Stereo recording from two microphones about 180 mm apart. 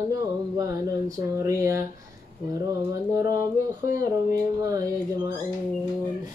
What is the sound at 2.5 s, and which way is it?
Speech, 15° right (ahead or behind).